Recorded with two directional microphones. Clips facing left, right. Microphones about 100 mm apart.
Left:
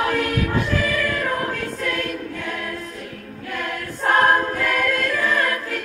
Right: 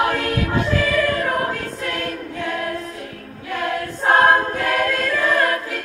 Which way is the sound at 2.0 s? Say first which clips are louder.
Right 2 dB; 35° right (ahead or behind).